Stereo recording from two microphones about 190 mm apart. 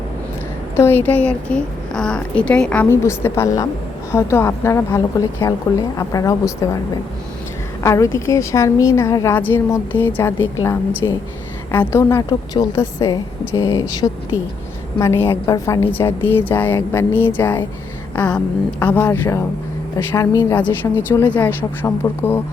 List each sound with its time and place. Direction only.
0.8 s a woman's voice: 10° left (ahead or behind)
7.9 s a woman's voice: 15° left (ahead or behind)
18.1 s a sound: 5° left (ahead or behind)
18.9 s a woman's voice: 10° left (ahead or behind)